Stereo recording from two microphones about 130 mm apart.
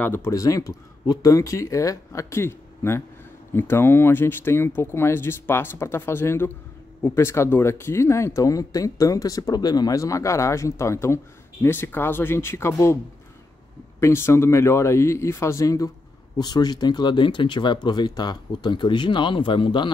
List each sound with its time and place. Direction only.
0.0 s speech: 20° left (ahead or behind); by 19.9 s 40° left (ahead or behind)